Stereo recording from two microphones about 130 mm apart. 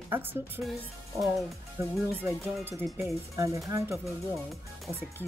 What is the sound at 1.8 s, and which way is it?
Speech, 20° right (ahead or behind).